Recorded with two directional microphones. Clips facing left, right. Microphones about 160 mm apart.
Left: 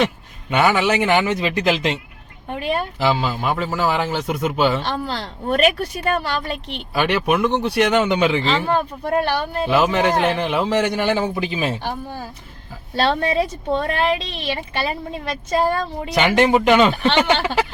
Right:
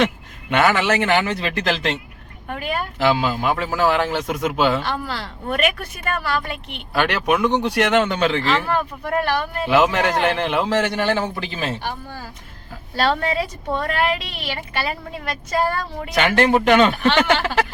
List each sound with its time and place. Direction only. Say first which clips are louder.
0.5 s speech: left 1 dB; 10° left (ahead or behind)
2.5 s a woman's voice: left 3 dB; 25° left (ahead or behind)
3.0 s a man's voice: right 4 dB; centre (ahead or behind)
4.8 s speech: left 1 dB; 30° left (ahead or behind)
6.9 s speech: left 1 dB; 5° left (ahead or behind); by 9.6 s 30° left (ahead or behind)
9.7 s speech: even; 5° left (ahead or behind)
13.0 s a woman's voice: left 2 dB; 25° left (ahead or behind)
16.1 s speech: left 1 dB; 15° left (ahead or behind)